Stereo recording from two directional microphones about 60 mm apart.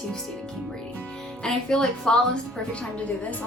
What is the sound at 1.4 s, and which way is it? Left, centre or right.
A woman's voice, centre.